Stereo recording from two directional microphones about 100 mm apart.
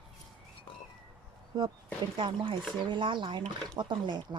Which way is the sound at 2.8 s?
50° right (ahead or behind).